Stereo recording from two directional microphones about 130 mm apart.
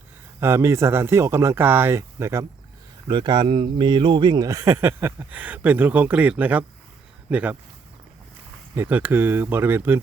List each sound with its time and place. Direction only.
0.3 s speech: 20° right (ahead or behind)
3.1 s speech: 35° right (ahead or behind); by 7.5 s 10° right (ahead or behind)
8.7 s speech: 15° right (ahead or behind)